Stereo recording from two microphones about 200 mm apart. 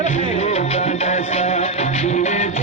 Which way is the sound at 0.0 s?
35° left (ahead or behind).